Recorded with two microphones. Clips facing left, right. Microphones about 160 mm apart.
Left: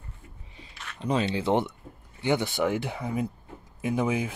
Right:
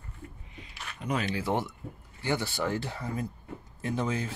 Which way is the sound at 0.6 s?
30° left (ahead or behind).